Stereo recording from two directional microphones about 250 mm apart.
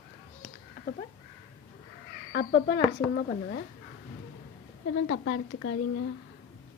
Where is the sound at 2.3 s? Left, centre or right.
Left.